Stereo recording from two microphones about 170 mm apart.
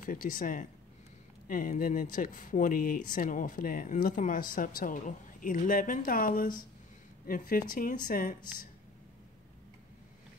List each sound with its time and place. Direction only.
0.0 s speech: 55° left (ahead or behind)